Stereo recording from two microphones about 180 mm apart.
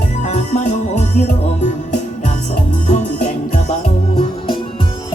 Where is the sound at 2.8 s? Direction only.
40° left (ahead or behind).